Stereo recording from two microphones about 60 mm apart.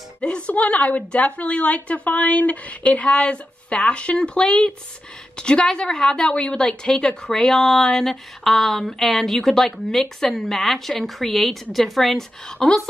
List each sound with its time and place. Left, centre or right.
0.5 s a woman's voice: left; by 12.8 s centre